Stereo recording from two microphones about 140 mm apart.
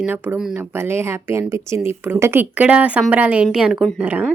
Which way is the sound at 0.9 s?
20° right (ahead or behind).